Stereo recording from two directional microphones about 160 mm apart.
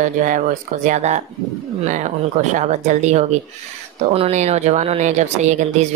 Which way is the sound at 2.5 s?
50° right (ahead or behind).